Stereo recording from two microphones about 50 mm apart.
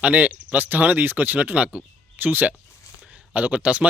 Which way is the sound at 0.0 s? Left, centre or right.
Right.